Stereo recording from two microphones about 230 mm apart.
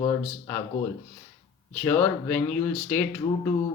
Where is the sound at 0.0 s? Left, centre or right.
Centre.